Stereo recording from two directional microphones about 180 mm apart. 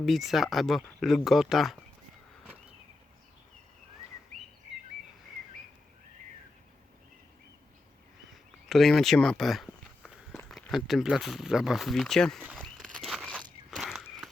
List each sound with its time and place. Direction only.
0.0 s speech: centre (ahead or behind)
8.7 s speech: centre (ahead or behind)
12.5 s a sound: 5° left (ahead or behind)
13.7 s walk: centre (ahead or behind)